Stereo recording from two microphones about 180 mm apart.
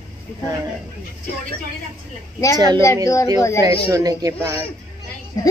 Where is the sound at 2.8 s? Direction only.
15° left (ahead or behind).